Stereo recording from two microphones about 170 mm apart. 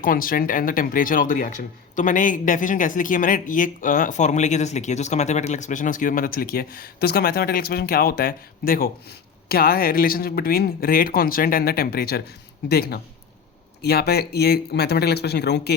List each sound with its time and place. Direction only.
0.0 s speech: 55° left (ahead or behind); by 15.7 s 80° left